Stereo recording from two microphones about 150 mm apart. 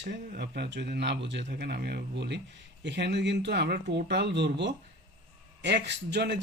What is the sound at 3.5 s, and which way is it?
Speech, 90° right.